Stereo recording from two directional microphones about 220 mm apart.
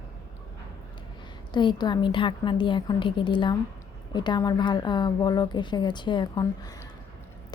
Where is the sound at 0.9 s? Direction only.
20° left (ahead or behind).